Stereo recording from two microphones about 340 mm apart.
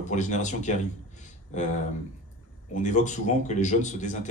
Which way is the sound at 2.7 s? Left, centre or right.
Left.